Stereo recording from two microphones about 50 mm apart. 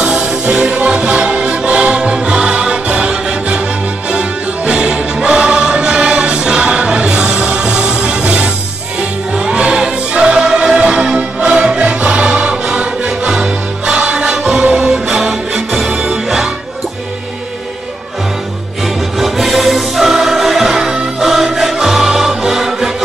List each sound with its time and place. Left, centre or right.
0.0 s music: centre
19.1 s music: centre